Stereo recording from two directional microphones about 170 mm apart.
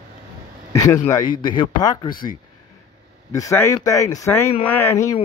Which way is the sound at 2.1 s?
55° left (ahead or behind).